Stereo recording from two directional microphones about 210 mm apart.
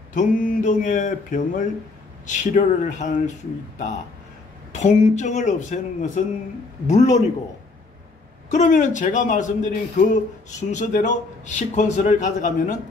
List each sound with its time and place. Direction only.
0.1 s a man's voice: 40° left (ahead or behind)
8.5 s a man's voice: 35° left (ahead or behind)